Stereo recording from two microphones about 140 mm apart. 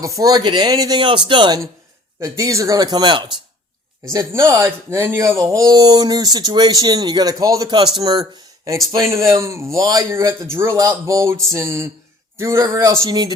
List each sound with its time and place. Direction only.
0.0 s speech: 25° right (ahead or behind)
2.2 s speech: 20° right (ahead or behind)
4.1 s speech: 20° right (ahead or behind)